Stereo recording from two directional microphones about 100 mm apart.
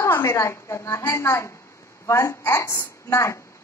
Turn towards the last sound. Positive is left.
turn(degrees=30)  # may be behind; listen again after turning